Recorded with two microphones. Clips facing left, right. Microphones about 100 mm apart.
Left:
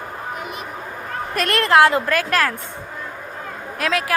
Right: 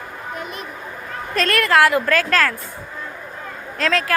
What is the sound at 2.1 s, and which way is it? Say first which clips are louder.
Speech: right 1 dB; 15° left (ahead or behind).